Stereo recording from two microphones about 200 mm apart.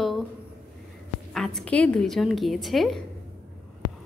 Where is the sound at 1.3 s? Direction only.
Centre (ahead or behind).